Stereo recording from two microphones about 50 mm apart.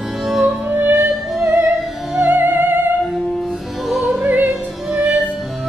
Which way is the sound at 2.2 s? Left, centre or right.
Right.